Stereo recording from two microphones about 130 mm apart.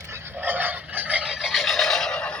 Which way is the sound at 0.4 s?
15° right (ahead or behind).